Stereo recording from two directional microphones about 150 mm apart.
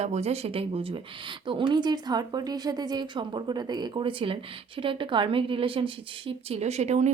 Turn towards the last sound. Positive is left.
turn(degrees=-50)  # may be behind; listen again after turning